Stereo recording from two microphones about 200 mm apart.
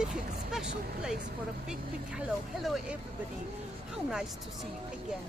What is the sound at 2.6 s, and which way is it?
Speech, centre (ahead or behind).